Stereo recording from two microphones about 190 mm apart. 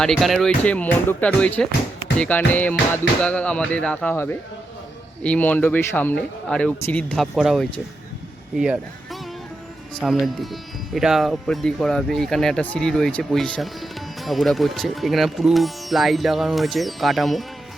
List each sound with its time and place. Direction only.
0.0 s speech: centre (ahead or behind)
9.9 s speech: centre (ahead or behind)